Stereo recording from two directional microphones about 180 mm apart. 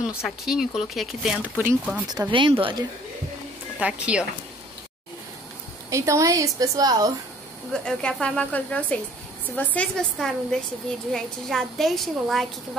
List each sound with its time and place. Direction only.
0.0 s speech: 5° right (ahead or behind)
2.1 s speech: 25° right (ahead or behind)
3.8 s a woman's voice: 5° right (ahead or behind)
5.9 s a woman's voice: 15° right (ahead or behind)
7.7 s a woman's voice: 5° left (ahead or behind)